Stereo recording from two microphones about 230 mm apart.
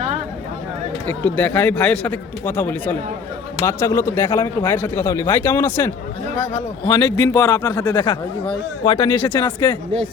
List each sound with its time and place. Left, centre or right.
1.0 s a man's voice: centre